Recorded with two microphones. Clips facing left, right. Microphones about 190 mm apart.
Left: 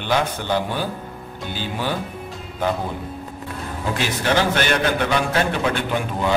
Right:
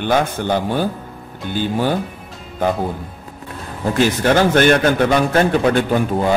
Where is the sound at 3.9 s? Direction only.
45° right (ahead or behind).